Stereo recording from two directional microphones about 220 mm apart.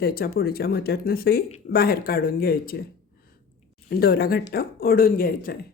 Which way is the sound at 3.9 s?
45° left (ahead or behind).